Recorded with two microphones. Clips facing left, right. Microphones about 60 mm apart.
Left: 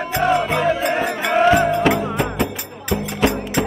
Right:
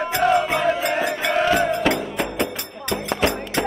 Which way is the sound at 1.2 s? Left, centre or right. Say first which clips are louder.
Left 7 dB; centre.